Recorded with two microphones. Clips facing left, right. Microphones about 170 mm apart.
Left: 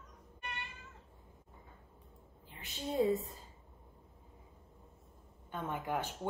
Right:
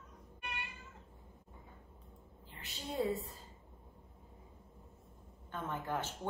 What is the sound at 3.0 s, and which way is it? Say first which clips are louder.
Speech: left 4 dB; 20° left (ahead or behind).